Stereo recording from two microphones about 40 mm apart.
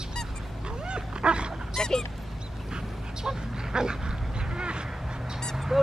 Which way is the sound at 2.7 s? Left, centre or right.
Centre.